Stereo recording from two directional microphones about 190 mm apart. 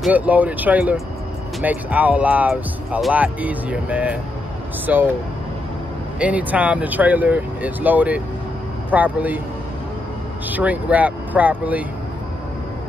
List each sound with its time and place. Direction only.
0.0 s speech: 10° right (ahead or behind)
6.1 s speech: 5° right (ahead or behind)
10.5 s speech: 10° right (ahead or behind)